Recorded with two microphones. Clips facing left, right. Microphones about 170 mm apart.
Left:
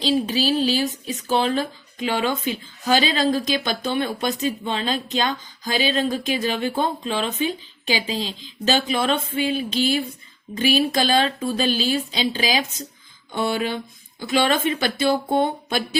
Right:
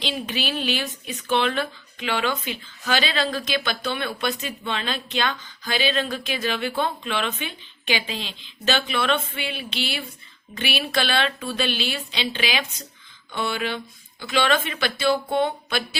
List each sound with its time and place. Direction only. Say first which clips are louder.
0.0 s speech: left 7 dB; 35° left (ahead or behind)